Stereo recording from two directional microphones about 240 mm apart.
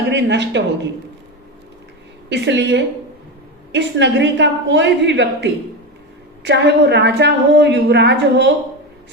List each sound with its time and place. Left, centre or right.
0.1 s speech: right
2.3 s a woman's voice: right